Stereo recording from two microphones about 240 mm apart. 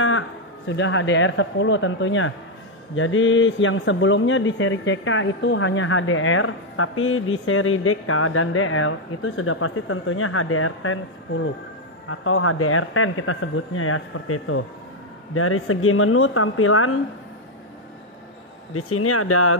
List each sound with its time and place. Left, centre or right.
0.7 s speech: left
18.7 s speech: left